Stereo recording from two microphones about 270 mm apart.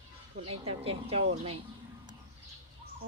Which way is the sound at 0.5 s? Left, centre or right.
Right.